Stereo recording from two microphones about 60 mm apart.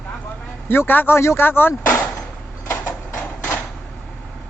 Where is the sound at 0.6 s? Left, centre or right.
Left.